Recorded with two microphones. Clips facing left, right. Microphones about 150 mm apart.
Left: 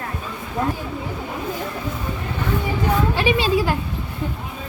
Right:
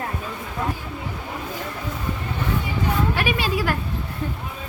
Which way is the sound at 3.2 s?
25° left (ahead or behind).